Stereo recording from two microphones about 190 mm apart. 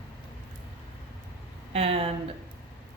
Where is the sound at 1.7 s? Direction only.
30° right (ahead or behind).